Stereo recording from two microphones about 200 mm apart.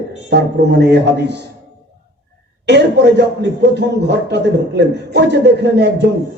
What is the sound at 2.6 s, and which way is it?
A man's voice, 55° right (ahead or behind).